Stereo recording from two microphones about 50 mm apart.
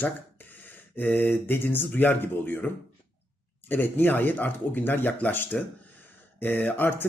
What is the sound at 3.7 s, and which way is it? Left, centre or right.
Speech, left.